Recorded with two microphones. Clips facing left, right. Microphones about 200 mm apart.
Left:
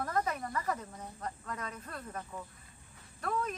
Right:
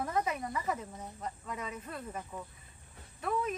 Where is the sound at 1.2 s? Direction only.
5° right (ahead or behind).